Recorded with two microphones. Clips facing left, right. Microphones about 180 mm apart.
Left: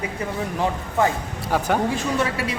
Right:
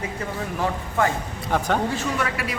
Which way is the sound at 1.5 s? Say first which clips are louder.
Left 1 dB; 10° left (ahead or behind).